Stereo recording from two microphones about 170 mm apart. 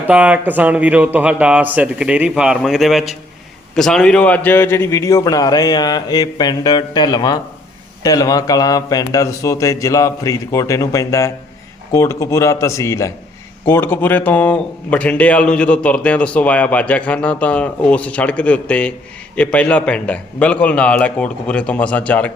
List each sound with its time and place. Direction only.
0.1 s a man's voice: 10° right (ahead or behind); by 22.3 s 10° left (ahead or behind)